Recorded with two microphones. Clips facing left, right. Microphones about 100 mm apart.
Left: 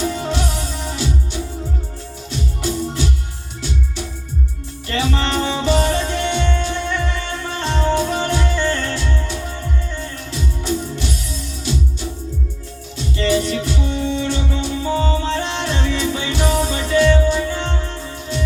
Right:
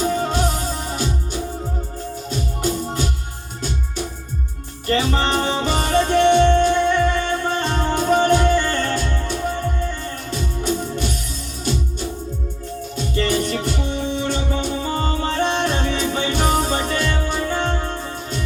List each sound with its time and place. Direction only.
0.0 s music: 40° right (ahead or behind)
2.3 s music: 45° right (ahead or behind)
4.9 s music: 40° right (ahead or behind)
13.0 s music: 50° right (ahead or behind)